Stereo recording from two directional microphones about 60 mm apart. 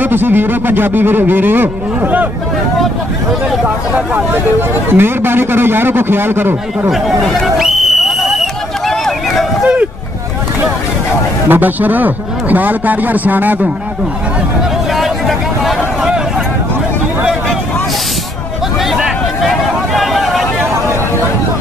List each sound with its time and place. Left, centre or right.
0.0 s a man's voice: right
3.9 s a man's voice: right
7.5 s a sound: centre
8.8 s run: centre
9.6 s vehicle: centre
11.4 s a man's voice: right
15.0 s vehicle: centre
18.9 s a sound: centre